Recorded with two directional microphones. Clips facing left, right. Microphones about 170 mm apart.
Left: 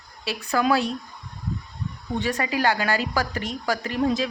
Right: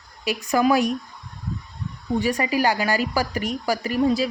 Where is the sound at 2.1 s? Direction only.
10° right (ahead or behind).